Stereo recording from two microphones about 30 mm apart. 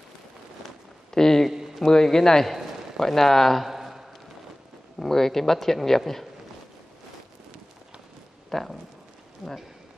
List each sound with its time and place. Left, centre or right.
1.1 s a sound: centre
1.8 s a man's voice: centre
3.6 s a sound: centre
4.9 s speech: centre
8.5 s speech: centre
9.4 s speech: centre